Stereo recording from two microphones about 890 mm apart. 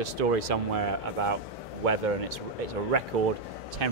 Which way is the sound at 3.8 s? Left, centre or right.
Right.